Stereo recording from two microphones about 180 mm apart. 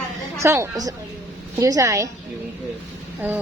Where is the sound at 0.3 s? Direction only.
15° right (ahead or behind).